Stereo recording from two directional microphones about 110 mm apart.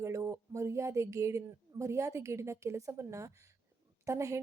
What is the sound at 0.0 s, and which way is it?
A woman's voice, 25° right (ahead or behind).